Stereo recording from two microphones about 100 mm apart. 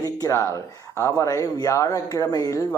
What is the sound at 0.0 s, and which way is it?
Speech, 30° left (ahead or behind).